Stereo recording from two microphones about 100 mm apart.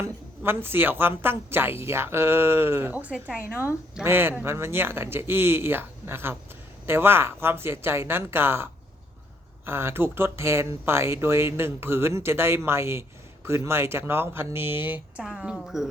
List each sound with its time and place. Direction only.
0.4 s speech: 20° right (ahead or behind)
15.2 s a woman's voice: 5° right (ahead or behind)